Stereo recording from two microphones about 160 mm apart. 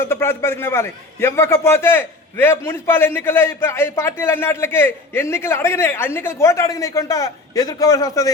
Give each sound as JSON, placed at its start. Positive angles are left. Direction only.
{"t": 0.0, "sound": "a man's voice", "side_deg": 15}